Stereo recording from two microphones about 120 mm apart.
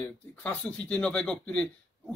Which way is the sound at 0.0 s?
15° left (ahead or behind).